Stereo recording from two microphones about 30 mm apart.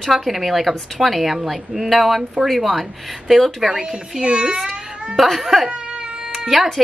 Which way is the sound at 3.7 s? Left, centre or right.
Right.